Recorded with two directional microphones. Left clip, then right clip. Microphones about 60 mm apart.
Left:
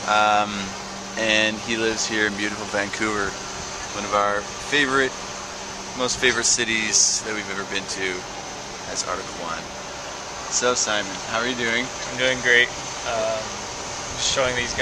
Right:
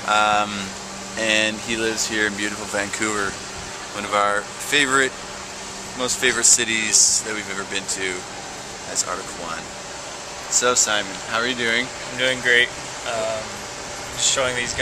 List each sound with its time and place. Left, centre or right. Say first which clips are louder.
0.0 s speech: even; centre
4.1 s speech: right 2 dB; right
5.9 s speech: even; centre
10.6 s speech: right 2 dB; right
12.2 s vehicle: even; centre
14.2 s speech: right 1 dB; centre